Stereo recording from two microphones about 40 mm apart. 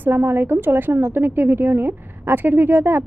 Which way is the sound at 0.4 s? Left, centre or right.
Right.